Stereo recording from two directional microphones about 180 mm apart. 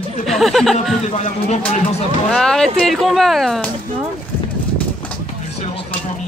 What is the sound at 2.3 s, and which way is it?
Speech, 5° left (ahead or behind).